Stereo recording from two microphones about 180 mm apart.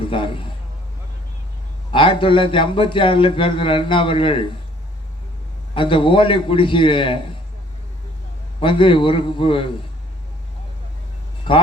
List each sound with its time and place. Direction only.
0.0 s speech: 30° left (ahead or behind)
1.9 s speech: 30° left (ahead or behind)
5.7 s speech: 30° left (ahead or behind)
8.6 s speech: 30° left (ahead or behind)
11.5 s speech: 30° left (ahead or behind)